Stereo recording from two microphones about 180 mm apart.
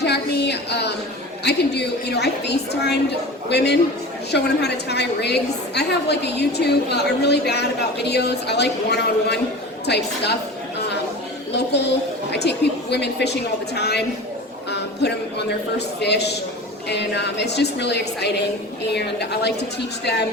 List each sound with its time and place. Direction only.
0.0 s a sound: 70° left (ahead or behind)
1.5 s a woman's voice: 70° left (ahead or behind)
12.3 s a woman's voice: 70° left (ahead or behind)